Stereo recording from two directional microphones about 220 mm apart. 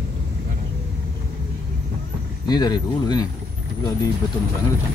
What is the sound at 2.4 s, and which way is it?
Speech, 20° left (ahead or behind).